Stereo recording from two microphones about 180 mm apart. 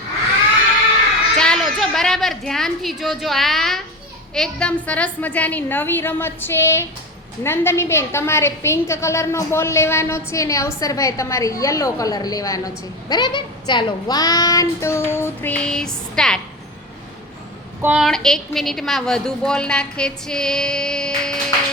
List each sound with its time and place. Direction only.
1.4 s a woman's voice: 5° left (ahead or behind)
17.8 s a woman's voice: centre (ahead or behind)